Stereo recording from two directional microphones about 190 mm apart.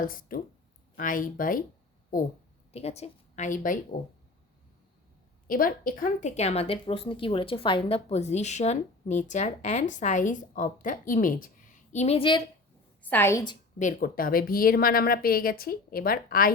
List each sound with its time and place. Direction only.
0.0 s a woman's voice: 45° left (ahead or behind)
2.7 s a woman's voice: 35° left (ahead or behind)
5.5 s speech: 50° left (ahead or behind); by 12.4 s 30° left (ahead or behind)
13.0 s a woman's voice: 10° left (ahead or behind)
13.7 s a woman's voice: 45° left (ahead or behind)